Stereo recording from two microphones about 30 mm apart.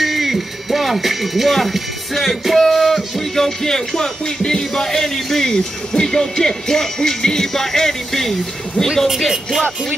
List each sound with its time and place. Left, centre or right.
0.0 s speech: centre
8.9 s speech: centre